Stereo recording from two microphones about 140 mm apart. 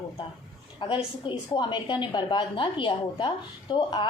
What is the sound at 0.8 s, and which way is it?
A woman's voice, 35° left (ahead or behind).